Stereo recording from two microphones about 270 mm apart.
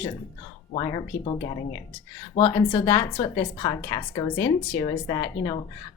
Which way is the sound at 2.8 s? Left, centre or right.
Centre.